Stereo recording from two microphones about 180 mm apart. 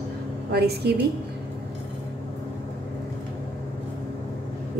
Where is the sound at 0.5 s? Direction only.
65° right (ahead or behind).